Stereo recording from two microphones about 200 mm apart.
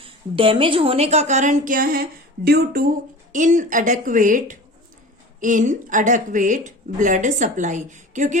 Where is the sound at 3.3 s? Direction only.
40° right (ahead or behind).